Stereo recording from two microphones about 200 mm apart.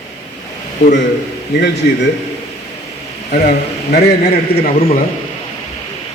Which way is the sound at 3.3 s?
50° left (ahead or behind).